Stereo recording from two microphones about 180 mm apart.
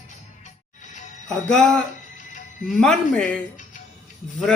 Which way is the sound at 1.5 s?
5° left (ahead or behind).